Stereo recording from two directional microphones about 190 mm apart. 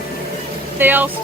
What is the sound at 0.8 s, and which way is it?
Speech, 10° right (ahead or behind).